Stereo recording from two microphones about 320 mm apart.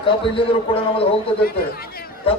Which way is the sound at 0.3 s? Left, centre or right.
Centre.